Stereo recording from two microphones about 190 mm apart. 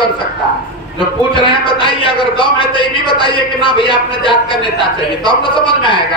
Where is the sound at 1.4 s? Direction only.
25° left (ahead or behind).